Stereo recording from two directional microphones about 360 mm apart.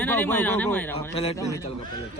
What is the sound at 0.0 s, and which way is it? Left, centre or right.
Speech, centre.